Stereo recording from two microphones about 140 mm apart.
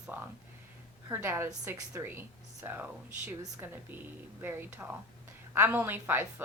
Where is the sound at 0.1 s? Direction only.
15° right (ahead or behind).